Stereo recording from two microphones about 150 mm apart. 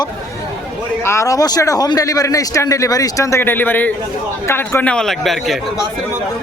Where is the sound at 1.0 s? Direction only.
20° left (ahead or behind); by 5.5 s centre (ahead or behind).